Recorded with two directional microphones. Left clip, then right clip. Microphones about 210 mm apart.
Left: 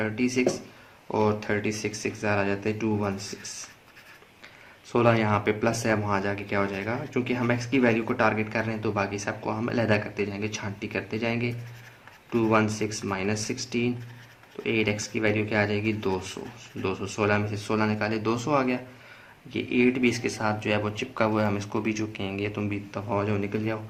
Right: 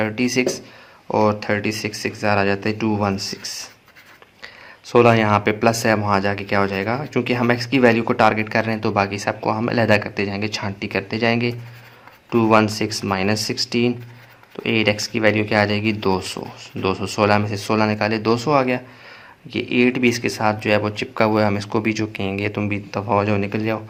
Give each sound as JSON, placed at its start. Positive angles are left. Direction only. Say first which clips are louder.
{"t": 0.0, "sound": "speech", "louder": "right 6 dB", "side_deg": -45}